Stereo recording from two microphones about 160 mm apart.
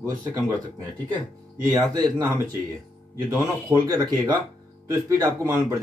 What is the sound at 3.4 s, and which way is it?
Speech, 25° right (ahead or behind).